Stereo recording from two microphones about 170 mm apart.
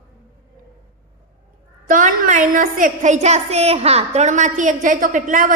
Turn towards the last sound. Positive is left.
turn(degrees=-50)  # may be behind; listen again after turning